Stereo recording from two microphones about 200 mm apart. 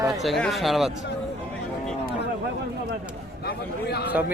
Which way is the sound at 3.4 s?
55° left (ahead or behind).